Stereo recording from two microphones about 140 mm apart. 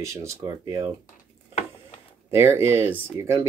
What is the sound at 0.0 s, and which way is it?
Speech, 20° right (ahead or behind).